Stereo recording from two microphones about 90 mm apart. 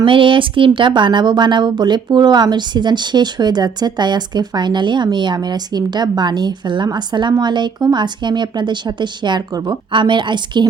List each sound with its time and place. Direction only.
0.0 s a woman's voice: 70° right (ahead or behind)